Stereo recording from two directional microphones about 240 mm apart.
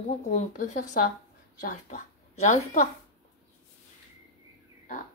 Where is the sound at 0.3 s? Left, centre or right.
Left.